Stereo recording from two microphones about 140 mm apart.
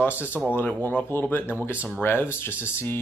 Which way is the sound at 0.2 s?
10° right (ahead or behind).